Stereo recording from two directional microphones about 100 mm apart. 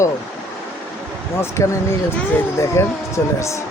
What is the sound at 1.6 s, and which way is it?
Speech, 30° left (ahead or behind).